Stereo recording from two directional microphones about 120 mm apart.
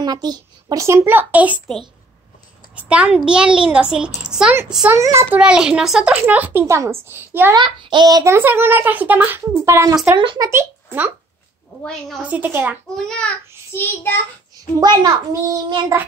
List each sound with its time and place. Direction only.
0.0 s speech: 35° right (ahead or behind)
0.8 s speech: 20° right (ahead or behind)
2.7 s a woman's voice: 10° right (ahead or behind)
4.9 s a woman's voice: 25° right (ahead or behind)
5.3 s speech: 5° right (ahead or behind)
7.5 s speech: 40° right (ahead or behind); by 9.4 s 15° right (ahead or behind)
9.5 s a woman's voice: 25° right (ahead or behind)
10.1 s speech: 40° right (ahead or behind)
10.5 s speech: 20° right (ahead or behind)
11.8 s a woman's voice: 5° left (ahead or behind)
12.2 s speech: 10° right (ahead or behind)
12.9 s a woman's voice: 5° left (ahead or behind)
13.7 s a child's voice: 15° left (ahead or behind)
14.5 s a child's voice: 35° right (ahead or behind)